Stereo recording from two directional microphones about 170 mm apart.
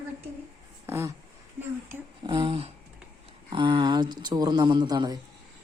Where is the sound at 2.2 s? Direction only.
30° right (ahead or behind).